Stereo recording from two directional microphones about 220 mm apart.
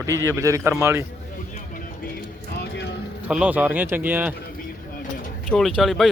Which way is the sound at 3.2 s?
5° right (ahead or behind).